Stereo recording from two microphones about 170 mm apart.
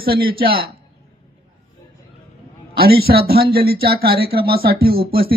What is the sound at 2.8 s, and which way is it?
Speech, 65° right (ahead or behind).